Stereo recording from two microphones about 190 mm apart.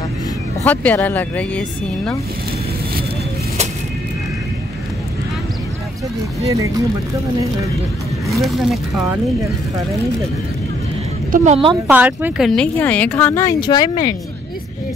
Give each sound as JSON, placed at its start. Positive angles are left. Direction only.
{"t": 0.7, "sound": "speech", "side_deg": 10}
{"t": 6.4, "sound": "speech", "side_deg": -15}
{"t": 8.3, "sound": "speech", "side_deg": 0}
{"t": 11.3, "sound": "a woman's voice", "side_deg": -40}
{"t": 11.9, "sound": "speech", "side_deg": -10}